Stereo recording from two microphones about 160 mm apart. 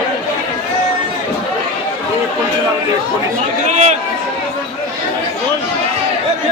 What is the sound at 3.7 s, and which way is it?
Run, 40° right (ahead or behind).